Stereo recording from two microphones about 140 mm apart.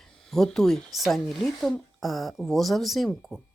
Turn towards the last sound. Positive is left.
turn(degrees=0)  # may be behind; listen again after turning